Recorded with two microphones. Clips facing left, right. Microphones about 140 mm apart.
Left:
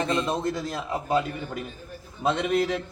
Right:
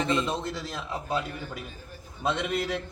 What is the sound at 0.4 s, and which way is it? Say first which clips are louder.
Speech: left 6 dB; 50° left (ahead or behind).